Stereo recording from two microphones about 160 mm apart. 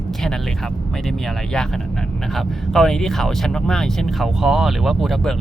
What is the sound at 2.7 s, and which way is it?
Speech, 5° left (ahead or behind).